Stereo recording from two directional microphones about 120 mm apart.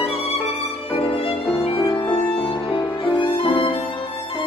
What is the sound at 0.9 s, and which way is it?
Violin, 50° left (ahead or behind).